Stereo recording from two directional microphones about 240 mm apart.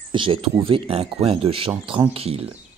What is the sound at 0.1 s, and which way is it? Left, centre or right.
Speech, right.